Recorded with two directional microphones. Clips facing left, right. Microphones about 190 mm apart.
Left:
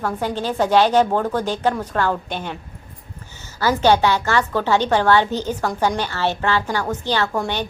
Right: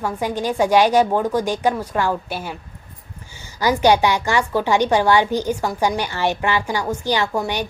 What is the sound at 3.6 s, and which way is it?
A woman's voice, 15° right (ahead or behind).